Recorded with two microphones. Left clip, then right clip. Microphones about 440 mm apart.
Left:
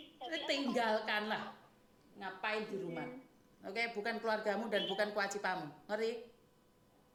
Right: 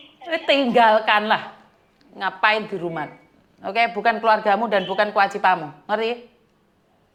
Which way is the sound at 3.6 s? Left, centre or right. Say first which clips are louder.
Right 19 dB; right.